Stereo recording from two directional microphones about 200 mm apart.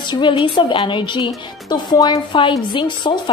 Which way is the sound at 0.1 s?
25° left (ahead or behind).